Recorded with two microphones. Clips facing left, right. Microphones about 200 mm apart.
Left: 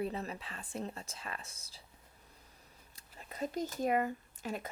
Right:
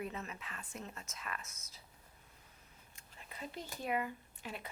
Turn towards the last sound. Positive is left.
turn(degrees=45)  # may be behind; listen again after turning